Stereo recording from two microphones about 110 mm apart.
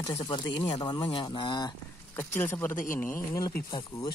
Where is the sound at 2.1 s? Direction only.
20° left (ahead or behind).